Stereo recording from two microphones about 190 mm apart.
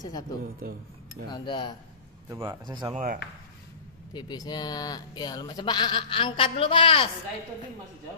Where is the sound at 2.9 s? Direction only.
40° right (ahead or behind).